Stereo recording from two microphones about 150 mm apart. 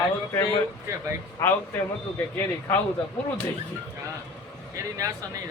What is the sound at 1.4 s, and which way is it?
Speech, 15° left (ahead or behind).